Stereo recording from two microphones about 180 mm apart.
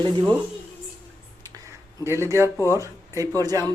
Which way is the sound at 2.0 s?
15° right (ahead or behind).